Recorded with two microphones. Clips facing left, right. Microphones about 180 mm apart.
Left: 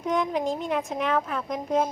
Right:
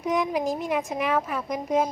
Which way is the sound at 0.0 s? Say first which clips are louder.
Right 1 dB; 5° right (ahead or behind).